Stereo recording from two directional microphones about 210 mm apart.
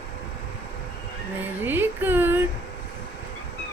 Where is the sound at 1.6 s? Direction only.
10° right (ahead or behind).